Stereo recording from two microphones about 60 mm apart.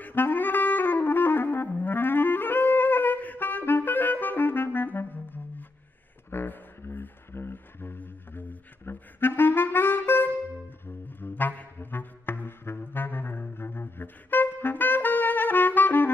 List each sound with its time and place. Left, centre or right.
0.0 s saxophone: left
1.7 s clarinet: left
6.3 s a sound: left
11.1 s saxophone: left